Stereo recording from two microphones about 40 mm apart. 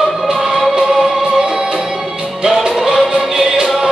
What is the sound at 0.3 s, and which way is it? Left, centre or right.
Music, centre.